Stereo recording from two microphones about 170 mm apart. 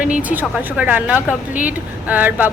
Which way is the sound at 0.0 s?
10° right (ahead or behind).